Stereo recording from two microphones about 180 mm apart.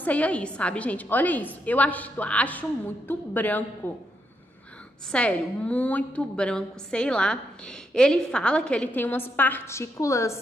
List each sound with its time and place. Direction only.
0.0 s a woman's voice: 10° left (ahead or behind)
5.1 s a woman's voice: 5° left (ahead or behind)